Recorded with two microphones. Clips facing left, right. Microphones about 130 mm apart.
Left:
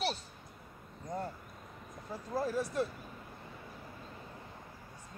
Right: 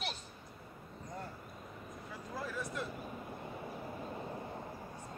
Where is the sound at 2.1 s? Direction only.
35° left (ahead or behind).